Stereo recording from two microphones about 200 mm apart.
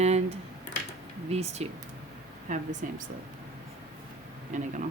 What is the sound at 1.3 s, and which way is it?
Speech, 30° right (ahead or behind).